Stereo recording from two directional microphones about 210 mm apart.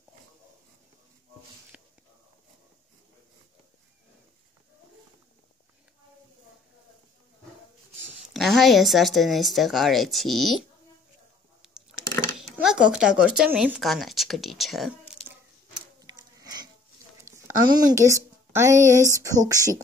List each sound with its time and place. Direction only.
8.3 s speech: centre (ahead or behind)
12.4 s speech: 5° right (ahead or behind)
16.0 s a sound: 20° right (ahead or behind)
17.2 s speech: 15° right (ahead or behind)